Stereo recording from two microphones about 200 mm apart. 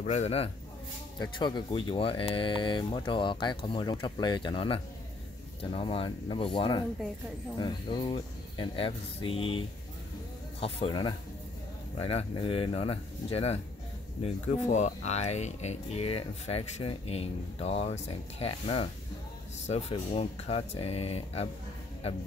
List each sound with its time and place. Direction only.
0.0 s speech: 35° left (ahead or behind)